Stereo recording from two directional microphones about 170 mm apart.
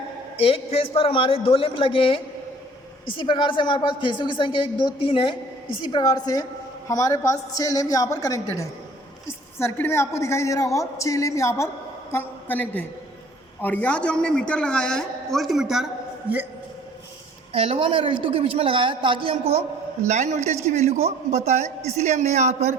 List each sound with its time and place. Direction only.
0.3 s a man's voice: 35° left (ahead or behind); by 15.9 s centre (ahead or behind)
17.5 s a man's voice: 35° right (ahead or behind)